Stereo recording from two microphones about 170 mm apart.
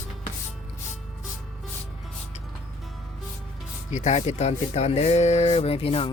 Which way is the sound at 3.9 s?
40° left (ahead or behind).